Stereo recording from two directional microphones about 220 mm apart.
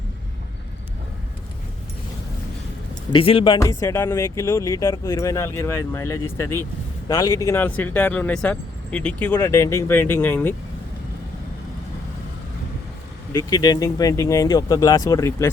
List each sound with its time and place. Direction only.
3.1 s speech: 25° left (ahead or behind); by 10.5 s 10° left (ahead or behind)
13.3 s speech: 15° left (ahead or behind)